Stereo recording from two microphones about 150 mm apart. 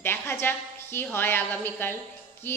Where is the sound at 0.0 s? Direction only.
15° left (ahead or behind).